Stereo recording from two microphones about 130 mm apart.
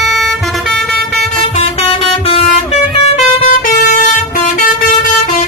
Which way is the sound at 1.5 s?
50° left (ahead or behind).